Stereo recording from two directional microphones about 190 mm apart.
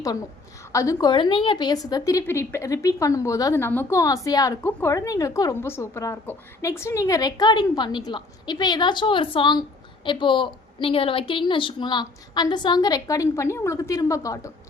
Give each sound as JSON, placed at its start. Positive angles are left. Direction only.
{"t": 0.7, "sound": "a woman's voice", "side_deg": 15}